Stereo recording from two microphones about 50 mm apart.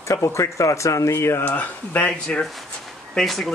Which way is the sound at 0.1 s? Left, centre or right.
Left.